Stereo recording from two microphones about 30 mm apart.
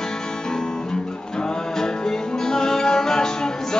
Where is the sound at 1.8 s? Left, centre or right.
Left.